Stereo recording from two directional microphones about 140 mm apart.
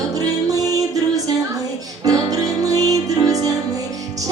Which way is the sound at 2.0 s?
25° right (ahead or behind).